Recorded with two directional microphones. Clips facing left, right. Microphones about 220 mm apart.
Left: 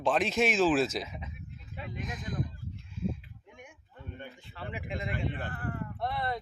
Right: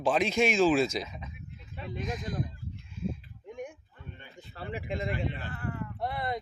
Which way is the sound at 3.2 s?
35° right (ahead or behind).